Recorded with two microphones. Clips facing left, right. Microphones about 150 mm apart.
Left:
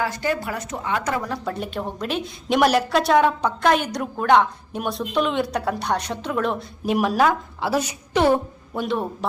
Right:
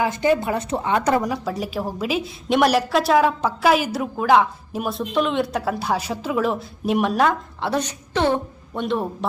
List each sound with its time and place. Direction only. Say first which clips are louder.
0.0 s a woman's voice: right 5 dB; 20° right (ahead or behind)
1.5 s a woman's voice: right 2 dB; 5° right (ahead or behind)